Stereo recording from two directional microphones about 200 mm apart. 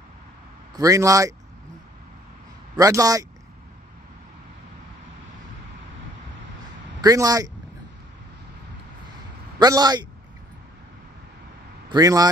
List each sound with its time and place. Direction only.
0.7 s speech: 15° right (ahead or behind)
2.7 s speech: 15° right (ahead or behind)
7.0 s speech: 20° right (ahead or behind)
9.6 s a man's voice: 20° right (ahead or behind)
11.9 s a man's voice: 20° right (ahead or behind)